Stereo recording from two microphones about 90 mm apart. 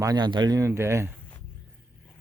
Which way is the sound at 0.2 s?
55° right (ahead or behind).